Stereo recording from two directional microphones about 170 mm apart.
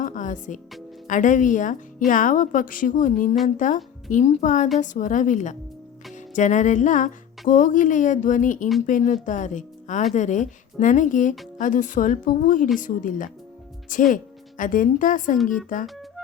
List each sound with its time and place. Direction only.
0.0 s music: 50° left (ahead or behind)
1.0 s speech: 50° left (ahead or behind)